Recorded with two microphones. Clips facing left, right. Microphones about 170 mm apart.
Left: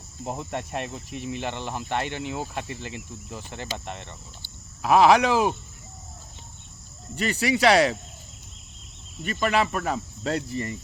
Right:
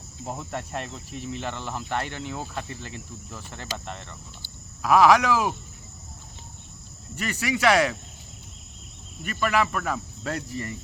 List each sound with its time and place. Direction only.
0.3 s speech: 20° left (ahead or behind)
7.2 s speech: 30° left (ahead or behind)
9.2 s speech: 25° left (ahead or behind)